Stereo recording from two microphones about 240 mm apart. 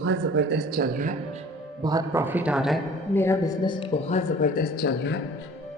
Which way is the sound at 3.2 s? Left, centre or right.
Centre.